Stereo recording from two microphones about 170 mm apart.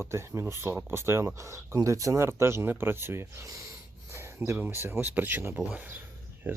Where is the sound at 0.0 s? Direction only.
15° right (ahead or behind).